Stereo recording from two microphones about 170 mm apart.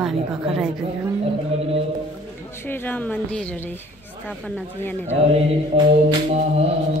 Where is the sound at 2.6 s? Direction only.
10° left (ahead or behind).